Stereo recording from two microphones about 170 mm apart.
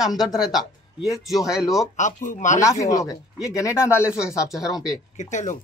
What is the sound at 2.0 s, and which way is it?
Speech, 45° left (ahead or behind).